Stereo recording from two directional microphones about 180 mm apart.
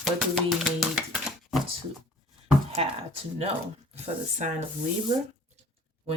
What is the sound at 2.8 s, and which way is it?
Speech, 35° right (ahead or behind).